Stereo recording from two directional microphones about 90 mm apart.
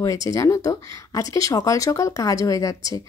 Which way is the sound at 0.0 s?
40° left (ahead or behind).